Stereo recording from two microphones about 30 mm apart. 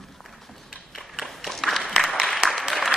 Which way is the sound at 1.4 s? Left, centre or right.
Centre.